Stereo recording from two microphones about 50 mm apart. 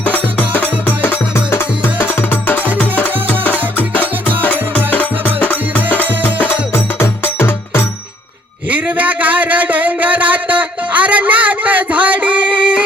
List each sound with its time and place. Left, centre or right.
0.0 s music: left
1.5 s music: left
8.7 s a sound: right